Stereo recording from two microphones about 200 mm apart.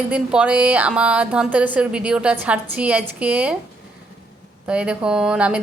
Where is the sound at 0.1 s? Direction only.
5° right (ahead or behind).